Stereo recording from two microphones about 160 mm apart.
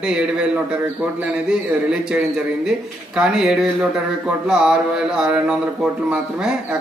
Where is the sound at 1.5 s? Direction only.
5° right (ahead or behind).